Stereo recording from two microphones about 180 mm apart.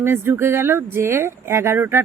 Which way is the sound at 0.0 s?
10° right (ahead or behind).